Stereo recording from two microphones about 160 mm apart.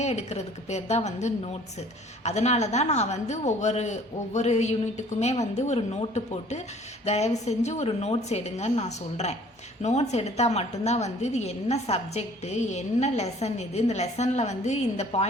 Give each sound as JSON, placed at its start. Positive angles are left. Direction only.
{"t": 0.0, "sound": "a woman's voice", "side_deg": 45}